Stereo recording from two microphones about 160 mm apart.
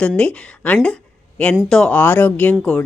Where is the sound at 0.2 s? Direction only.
10° left (ahead or behind).